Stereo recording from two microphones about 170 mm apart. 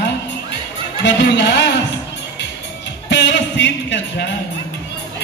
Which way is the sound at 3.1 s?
90° left.